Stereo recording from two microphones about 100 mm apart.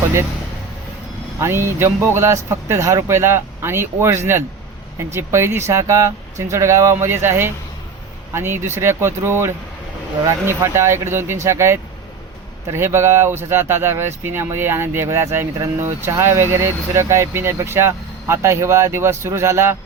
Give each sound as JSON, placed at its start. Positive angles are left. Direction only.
{"t": 1.4, "sound": "speech", "side_deg": -25}